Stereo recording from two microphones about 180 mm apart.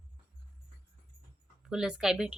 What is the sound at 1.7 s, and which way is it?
Speech, 5° right (ahead or behind).